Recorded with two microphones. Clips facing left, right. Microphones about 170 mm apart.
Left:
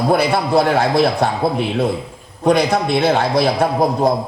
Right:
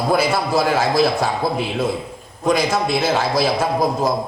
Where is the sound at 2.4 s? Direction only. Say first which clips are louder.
Left 3 dB; 60° left (ahead or behind).